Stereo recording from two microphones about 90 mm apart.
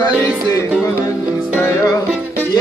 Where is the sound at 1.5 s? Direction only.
30° left (ahead or behind).